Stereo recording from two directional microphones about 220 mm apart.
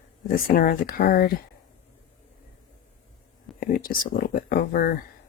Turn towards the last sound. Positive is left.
turn(degrees=40)  # may be behind; listen again after turning